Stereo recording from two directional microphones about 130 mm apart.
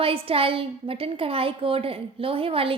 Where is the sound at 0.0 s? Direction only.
45° right (ahead or behind).